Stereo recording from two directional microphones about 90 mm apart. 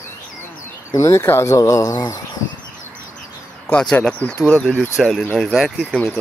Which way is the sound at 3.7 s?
10° left (ahead or behind).